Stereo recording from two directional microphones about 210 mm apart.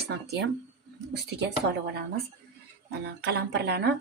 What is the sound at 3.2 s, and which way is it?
Speech, 50° right (ahead or behind).